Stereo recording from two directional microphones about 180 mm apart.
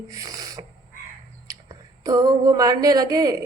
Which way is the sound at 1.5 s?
20° right (ahead or behind).